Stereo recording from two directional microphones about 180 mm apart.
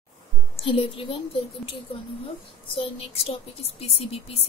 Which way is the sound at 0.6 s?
30° left (ahead or behind).